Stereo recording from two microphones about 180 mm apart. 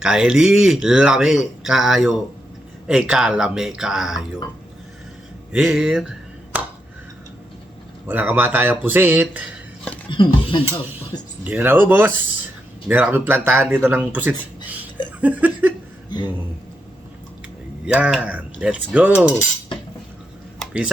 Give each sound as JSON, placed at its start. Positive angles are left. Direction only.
{"t": 0.0, "sound": "speech", "side_deg": -5}
{"t": 5.5, "sound": "music", "side_deg": -5}
{"t": 8.0, "sound": "speech", "side_deg": -10}
{"t": 10.1, "sound": "speech", "side_deg": 25}
{"t": 11.4, "sound": "speech", "side_deg": -10}
{"t": 16.0, "sound": "speech", "side_deg": 25}
{"t": 17.8, "sound": "speech", "side_deg": -5}
{"t": 20.6, "sound": "a sound", "side_deg": -5}